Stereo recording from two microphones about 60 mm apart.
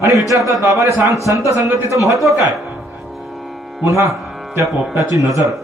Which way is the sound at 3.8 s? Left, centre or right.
Right.